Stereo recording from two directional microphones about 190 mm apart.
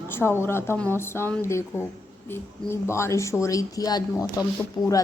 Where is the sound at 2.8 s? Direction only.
15° left (ahead or behind).